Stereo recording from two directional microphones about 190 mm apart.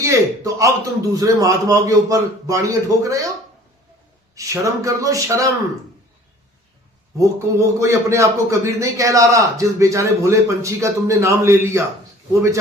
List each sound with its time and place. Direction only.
0.0 s a man's voice: 15° right (ahead or behind)
4.4 s a man's voice: 15° right (ahead or behind)
7.2 s a man's voice: 15° right (ahead or behind)